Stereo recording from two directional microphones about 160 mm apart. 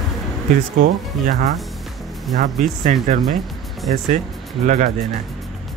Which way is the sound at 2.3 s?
50° right (ahead or behind).